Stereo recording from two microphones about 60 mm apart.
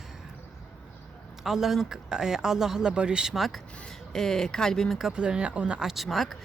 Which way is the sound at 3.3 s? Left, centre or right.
Centre.